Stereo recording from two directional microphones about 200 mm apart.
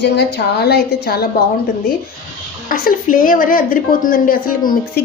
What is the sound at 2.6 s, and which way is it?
A woman's voice, 45° left (ahead or behind).